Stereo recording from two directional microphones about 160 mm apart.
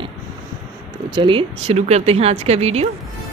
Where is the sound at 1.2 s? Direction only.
35° right (ahead or behind).